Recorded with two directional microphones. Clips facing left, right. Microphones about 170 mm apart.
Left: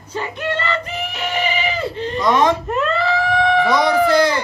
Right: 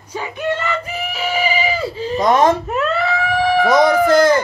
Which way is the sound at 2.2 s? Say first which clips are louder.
Right 2 dB; 45° right (ahead or behind).